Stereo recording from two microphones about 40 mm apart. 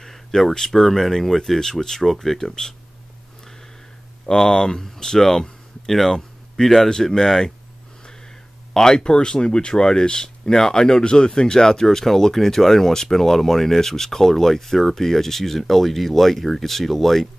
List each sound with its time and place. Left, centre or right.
0.0 s speech: centre
4.3 s speech: centre
8.7 s speech: centre